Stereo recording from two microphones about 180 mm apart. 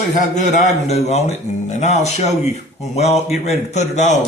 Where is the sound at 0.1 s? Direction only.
40° left (ahead or behind).